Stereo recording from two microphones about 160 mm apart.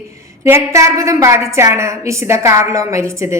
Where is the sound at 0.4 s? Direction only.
15° right (ahead or behind).